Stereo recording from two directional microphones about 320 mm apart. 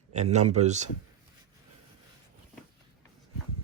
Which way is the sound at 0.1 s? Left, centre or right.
Right.